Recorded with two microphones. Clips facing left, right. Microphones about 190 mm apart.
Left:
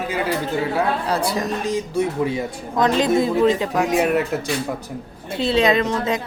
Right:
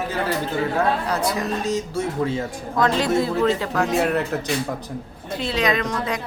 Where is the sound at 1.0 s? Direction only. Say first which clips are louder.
Left 1 dB; 30° left (ahead or behind).